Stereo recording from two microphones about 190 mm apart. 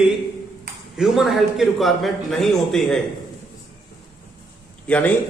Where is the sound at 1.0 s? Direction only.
Centre (ahead or behind).